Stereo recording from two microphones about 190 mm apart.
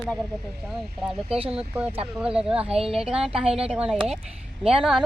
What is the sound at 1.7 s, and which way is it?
Speech, 10° right (ahead or behind).